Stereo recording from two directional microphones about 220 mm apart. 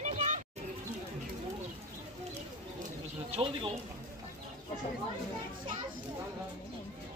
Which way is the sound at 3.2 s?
25° right (ahead or behind).